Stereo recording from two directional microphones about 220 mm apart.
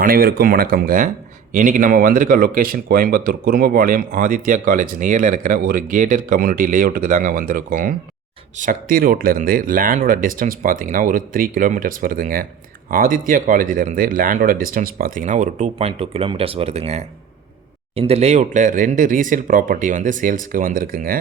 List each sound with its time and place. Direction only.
0.0 s speech: 45° right (ahead or behind)